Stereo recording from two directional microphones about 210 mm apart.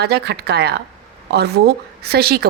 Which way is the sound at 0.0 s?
50° right (ahead or behind).